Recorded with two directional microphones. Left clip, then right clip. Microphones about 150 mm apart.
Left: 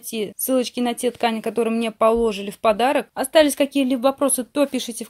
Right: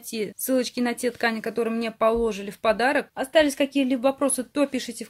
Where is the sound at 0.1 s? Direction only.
15° left (ahead or behind).